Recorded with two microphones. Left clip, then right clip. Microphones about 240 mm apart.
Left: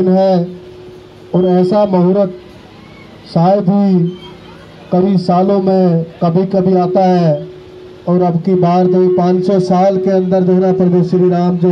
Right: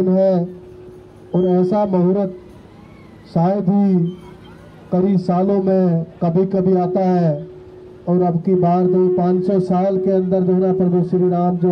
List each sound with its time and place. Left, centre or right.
0.0 s a man's voice: left
3.3 s a man's voice: left